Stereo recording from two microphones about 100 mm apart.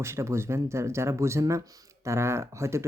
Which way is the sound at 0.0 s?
30° right (ahead or behind).